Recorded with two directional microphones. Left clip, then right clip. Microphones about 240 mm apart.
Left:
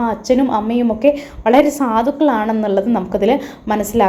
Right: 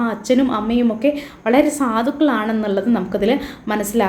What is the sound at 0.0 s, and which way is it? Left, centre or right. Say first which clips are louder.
A woman's voice: left 2 dB; centre.